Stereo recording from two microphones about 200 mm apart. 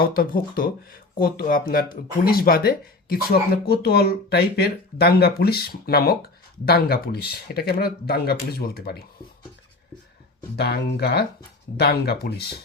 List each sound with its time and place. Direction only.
0.0 s speech: 45° left (ahead or behind)
10.6 s speech: 55° left (ahead or behind)